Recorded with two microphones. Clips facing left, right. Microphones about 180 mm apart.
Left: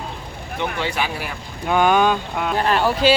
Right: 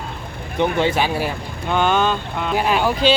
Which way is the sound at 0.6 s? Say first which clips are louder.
Right 6 dB; 20° right (ahead or behind).